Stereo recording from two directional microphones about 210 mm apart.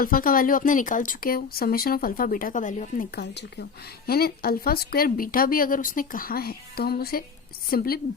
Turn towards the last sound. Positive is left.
turn(degrees=45)  # may be behind; listen again after turning